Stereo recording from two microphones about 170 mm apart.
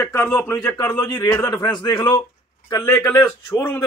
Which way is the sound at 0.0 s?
15° left (ahead or behind).